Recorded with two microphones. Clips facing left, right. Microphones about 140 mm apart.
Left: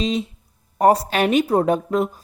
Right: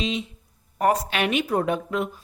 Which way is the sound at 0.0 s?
35° left (ahead or behind).